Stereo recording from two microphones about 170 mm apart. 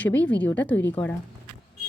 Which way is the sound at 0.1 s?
90° left.